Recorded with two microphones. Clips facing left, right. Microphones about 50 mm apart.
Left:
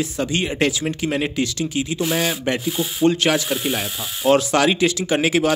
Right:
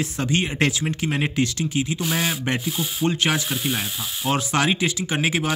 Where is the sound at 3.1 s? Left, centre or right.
Centre.